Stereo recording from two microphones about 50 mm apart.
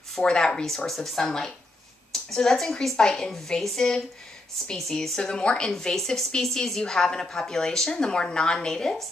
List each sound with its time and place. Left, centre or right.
0.2 s speech: centre
0.8 s speech: centre